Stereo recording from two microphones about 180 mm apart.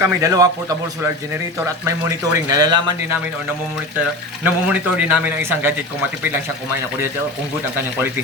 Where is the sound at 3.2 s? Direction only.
10° right (ahead or behind).